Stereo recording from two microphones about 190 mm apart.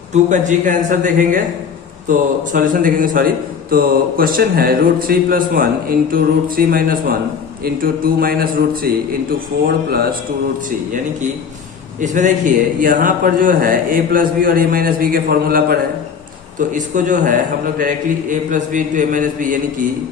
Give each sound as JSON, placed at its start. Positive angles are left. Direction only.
{"t": 0.1, "sound": "a man's voice", "side_deg": -40}
{"t": 11.9, "sound": "a man's voice", "side_deg": -40}
{"t": 16.6, "sound": "a man's voice", "side_deg": -40}